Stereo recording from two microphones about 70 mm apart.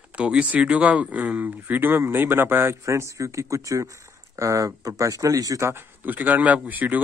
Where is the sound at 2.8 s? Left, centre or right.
Right.